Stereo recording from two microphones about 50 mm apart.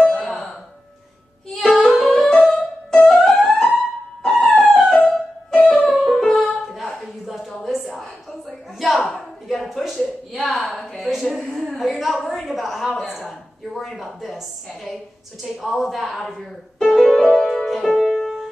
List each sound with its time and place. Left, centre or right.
0.0 s sigh: centre
1.5 s music: centre
5.9 s music: centre
6.4 s a sound: centre
16.8 s music: centre